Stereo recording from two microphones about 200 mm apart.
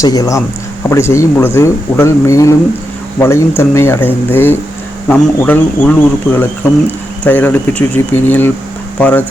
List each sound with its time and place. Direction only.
0.0 s speech: 15° left (ahead or behind)